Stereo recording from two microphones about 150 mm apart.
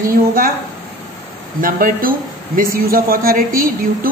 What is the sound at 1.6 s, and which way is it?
A woman's voice, 70° right (ahead or behind).